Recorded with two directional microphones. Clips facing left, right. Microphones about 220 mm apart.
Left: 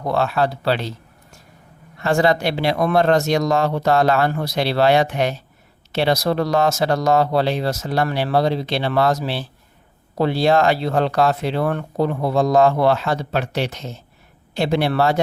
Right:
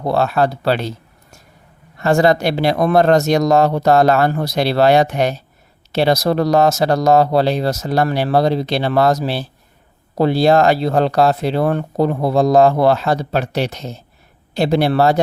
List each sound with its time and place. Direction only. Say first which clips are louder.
0.0 s speech: right 3 dB; 35° right (ahead or behind)
2.0 s speech: right 4 dB; 40° right (ahead or behind)